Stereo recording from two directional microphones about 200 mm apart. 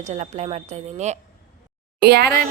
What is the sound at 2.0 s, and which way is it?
Speech, 55° right (ahead or behind).